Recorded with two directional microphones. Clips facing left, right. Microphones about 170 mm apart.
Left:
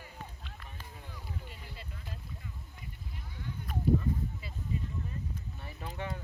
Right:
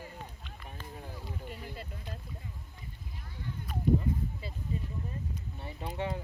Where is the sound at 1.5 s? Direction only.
45° right (ahead or behind).